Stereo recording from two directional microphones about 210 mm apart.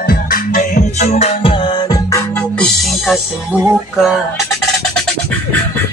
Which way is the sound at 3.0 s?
Centre (ahead or behind).